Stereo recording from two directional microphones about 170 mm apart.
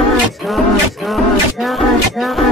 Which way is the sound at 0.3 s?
Centre (ahead or behind).